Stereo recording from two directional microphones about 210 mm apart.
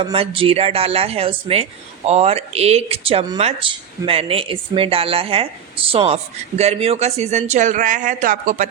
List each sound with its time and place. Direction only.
0.0 s speech: 25° right (ahead or behind)